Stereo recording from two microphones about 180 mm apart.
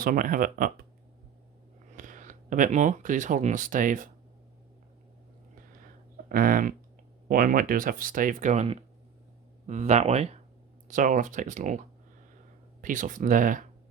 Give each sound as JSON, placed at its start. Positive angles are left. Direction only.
{"t": 0.0, "sound": "speech", "side_deg": -50}
{"t": 1.9, "sound": "speech", "side_deg": -45}
{"t": 6.2, "sound": "speech", "side_deg": -50}
{"t": 9.6, "sound": "speech", "side_deg": -40}